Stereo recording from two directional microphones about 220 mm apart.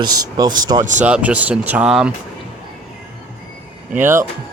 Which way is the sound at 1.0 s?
5° right (ahead or behind).